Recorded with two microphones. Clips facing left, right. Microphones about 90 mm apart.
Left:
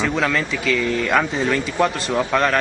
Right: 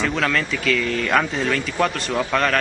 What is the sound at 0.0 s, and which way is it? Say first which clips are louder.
Speech: left 1 dB; centre (ahead or behind).